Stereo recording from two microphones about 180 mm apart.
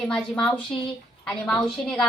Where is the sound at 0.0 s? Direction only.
5° left (ahead or behind).